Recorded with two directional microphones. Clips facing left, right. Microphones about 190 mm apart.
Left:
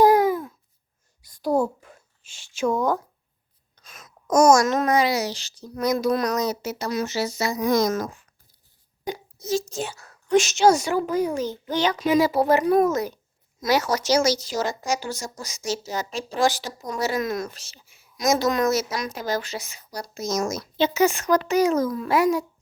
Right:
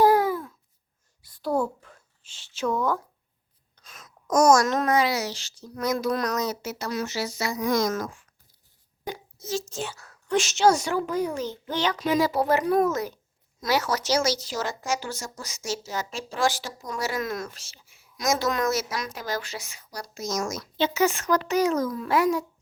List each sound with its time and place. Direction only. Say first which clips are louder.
0.0 s babbling: left 3 dB; 15° left (ahead or behind)
1.4 s speech: left 4 dB; 10° left (ahead or behind)
4.4 s a child's voice: left 2 dB; 5° left (ahead or behind)
4.9 s a woman's voice: left 2 dB; 15° left (ahead or behind)
9.0 s hiccup: left 5 dB; 15° left (ahead or behind)
9.6 s a woman's voice: left 3 dB; 10° left (ahead or behind)
9.9 s speech: left 1 dB; 40° left (ahead or behind)
10.2 s a woman's voice: left 3 dB; 15° left (ahead or behind)